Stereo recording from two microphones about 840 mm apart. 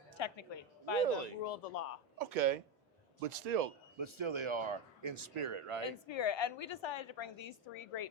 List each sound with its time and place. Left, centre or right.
0.2 s a woman's voice: left
1.0 s a man's voice: right
1.5 s speech: left
2.1 s speech: right
3.2 s a man's voice: right
3.9 s speech: right
5.8 s a woman's voice: left